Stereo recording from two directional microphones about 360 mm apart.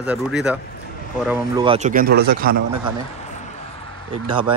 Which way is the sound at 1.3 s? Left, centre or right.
Centre.